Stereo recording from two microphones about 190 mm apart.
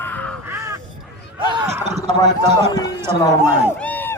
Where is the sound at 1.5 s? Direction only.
15° right (ahead or behind).